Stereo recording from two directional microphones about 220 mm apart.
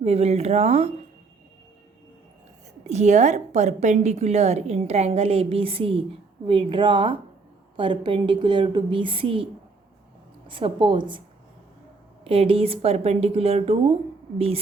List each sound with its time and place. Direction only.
0.0 s a woman's voice: 30° right (ahead or behind)
2.8 s a woman's voice: 30° right (ahead or behind)
12.2 s a woman's voice: 25° right (ahead or behind)